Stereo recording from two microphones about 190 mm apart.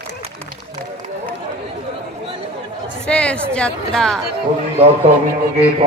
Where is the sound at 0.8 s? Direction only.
40° right (ahead or behind).